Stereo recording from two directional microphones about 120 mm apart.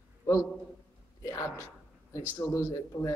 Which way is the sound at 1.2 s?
25° left (ahead or behind).